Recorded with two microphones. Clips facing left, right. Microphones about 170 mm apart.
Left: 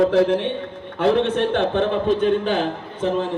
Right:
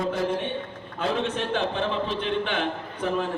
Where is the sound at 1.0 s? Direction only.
60° left (ahead or behind); by 2.6 s 40° left (ahead or behind).